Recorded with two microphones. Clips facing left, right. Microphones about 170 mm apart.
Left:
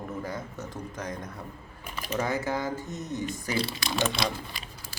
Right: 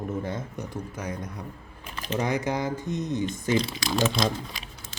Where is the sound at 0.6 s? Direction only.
10° right (ahead or behind).